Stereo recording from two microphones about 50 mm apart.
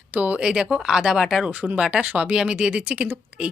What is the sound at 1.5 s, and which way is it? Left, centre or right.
Speech, right.